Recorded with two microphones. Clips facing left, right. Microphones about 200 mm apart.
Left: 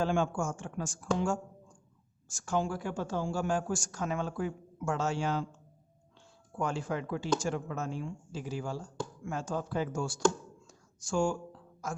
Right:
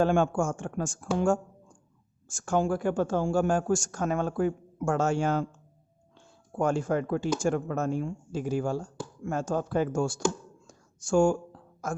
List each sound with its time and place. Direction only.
0.0 s speech: 55° right (ahead or behind)
10.7 s whispering: 50° right (ahead or behind)